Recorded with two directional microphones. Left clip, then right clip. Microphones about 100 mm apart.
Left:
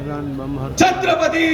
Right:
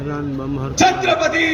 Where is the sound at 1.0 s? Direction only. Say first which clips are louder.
Even; 40° left (ahead or behind).